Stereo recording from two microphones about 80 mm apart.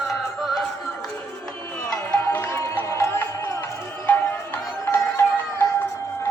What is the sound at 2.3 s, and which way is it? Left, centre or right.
Music, left.